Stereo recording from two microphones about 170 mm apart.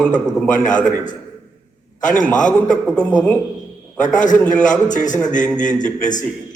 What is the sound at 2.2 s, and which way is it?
A man's voice, 5° left (ahead or behind).